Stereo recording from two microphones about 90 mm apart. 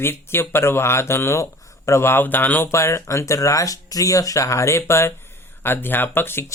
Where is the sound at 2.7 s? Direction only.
30° left (ahead or behind).